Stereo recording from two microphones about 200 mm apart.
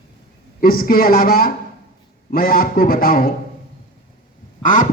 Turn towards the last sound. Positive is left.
turn(degrees=40)  # may be behind; listen again after turning